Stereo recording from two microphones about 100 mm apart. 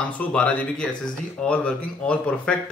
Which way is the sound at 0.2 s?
10° left (ahead or behind).